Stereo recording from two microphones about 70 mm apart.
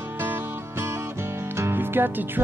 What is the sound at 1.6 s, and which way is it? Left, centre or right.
Music, right.